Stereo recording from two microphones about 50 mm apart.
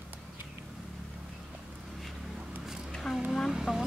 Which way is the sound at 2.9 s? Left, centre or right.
Centre.